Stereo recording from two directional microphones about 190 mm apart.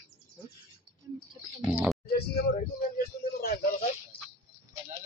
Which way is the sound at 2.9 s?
55° left (ahead or behind).